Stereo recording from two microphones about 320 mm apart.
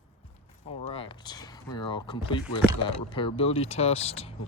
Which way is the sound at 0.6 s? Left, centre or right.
Centre.